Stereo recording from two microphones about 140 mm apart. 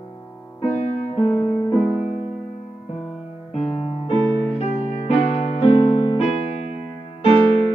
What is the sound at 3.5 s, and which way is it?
Music, 40° left (ahead or behind).